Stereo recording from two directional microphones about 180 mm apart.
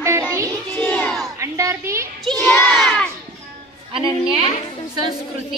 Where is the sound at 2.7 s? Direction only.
Centre (ahead or behind).